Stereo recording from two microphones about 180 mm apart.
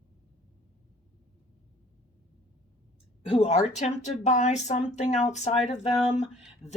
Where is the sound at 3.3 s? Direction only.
35° left (ahead or behind).